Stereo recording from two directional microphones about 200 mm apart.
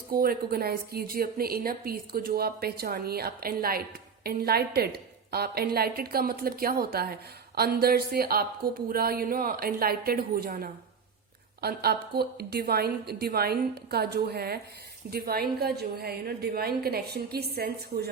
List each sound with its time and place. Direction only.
0.1 s speech: 45° right (ahead or behind)